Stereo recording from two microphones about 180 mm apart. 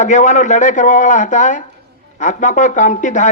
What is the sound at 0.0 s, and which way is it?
Speech, 45° left (ahead or behind).